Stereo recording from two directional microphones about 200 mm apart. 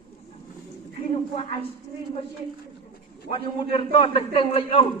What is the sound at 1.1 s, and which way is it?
Speech, 30° left (ahead or behind).